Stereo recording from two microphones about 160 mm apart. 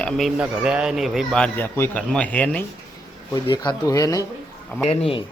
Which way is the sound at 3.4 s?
25° left (ahead or behind).